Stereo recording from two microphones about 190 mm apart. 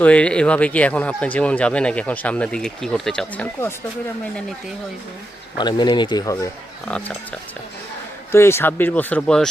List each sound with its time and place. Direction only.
0.0 s speech: 5° left (ahead or behind)
5.5 s speech: 25° left (ahead or behind)
8.3 s speech: 15° left (ahead or behind)